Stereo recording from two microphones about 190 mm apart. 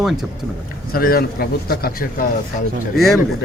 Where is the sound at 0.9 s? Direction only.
50° left (ahead or behind).